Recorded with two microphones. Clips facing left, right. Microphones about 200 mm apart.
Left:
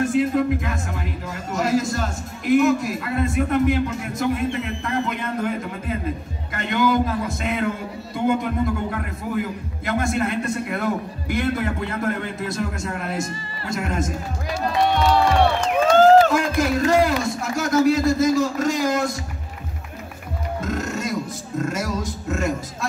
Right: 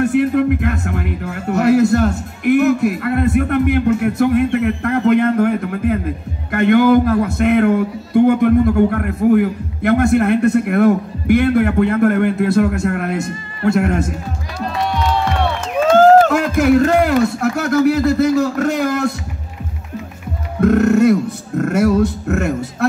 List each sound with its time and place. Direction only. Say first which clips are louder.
0.0 s a man's voice: right 5 dB; 65° right (ahead or behind)
15.9 s a man's voice: right 4 dB; 55° right (ahead or behind)
20.6 s a man's voice: right 17 dB; 65° right (ahead or behind)